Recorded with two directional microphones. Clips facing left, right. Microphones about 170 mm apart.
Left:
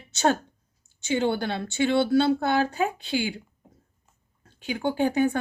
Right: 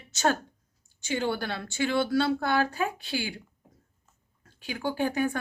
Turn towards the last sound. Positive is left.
turn(degrees=25)  # may be behind; listen again after turning